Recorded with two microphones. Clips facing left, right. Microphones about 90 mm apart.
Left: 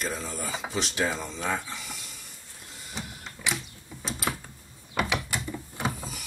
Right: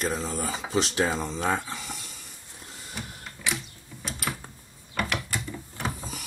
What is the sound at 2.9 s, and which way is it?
Printer, 20° left (ahead or behind).